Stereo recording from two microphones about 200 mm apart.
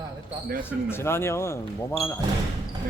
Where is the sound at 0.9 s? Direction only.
10° left (ahead or behind).